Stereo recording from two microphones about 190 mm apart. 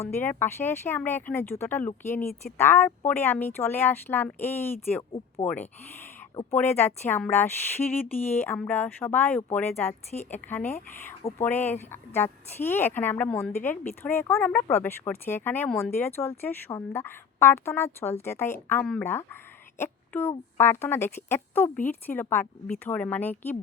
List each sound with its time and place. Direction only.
0.0 s a woman's voice: 10° left (ahead or behind)